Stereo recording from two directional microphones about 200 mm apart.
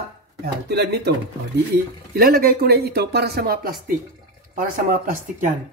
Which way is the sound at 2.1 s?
50° right (ahead or behind).